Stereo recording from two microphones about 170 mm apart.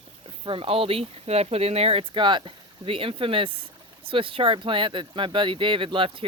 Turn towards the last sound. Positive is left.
turn(degrees=-30)  # may be behind; listen again after turning